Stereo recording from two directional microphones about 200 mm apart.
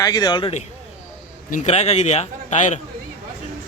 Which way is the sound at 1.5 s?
35° left (ahead or behind).